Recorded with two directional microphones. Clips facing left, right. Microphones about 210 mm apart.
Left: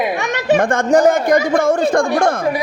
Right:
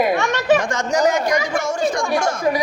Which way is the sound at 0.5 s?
55° left (ahead or behind).